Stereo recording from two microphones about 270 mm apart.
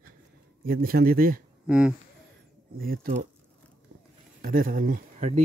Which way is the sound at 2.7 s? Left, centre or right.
Right.